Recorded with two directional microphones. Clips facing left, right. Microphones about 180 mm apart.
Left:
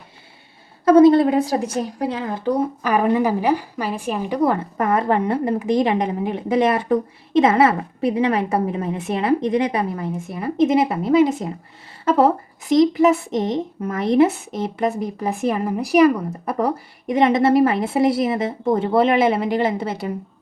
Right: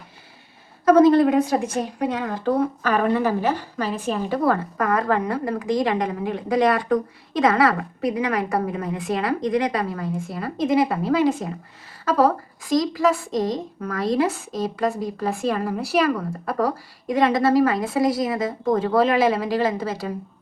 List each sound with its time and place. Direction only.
0.9 s a woman's voice: 30° left (ahead or behind)